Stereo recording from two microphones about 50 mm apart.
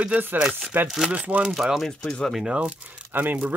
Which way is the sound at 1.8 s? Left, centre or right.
Centre.